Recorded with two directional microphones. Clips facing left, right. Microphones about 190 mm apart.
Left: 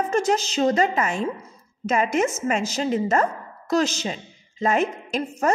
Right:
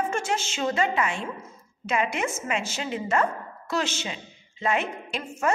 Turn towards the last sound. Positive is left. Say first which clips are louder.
# left 4 dB
turn(degrees=40)  # may be behind; listen again after turning